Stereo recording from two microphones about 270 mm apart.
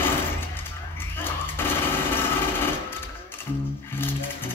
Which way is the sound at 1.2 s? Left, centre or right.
Centre.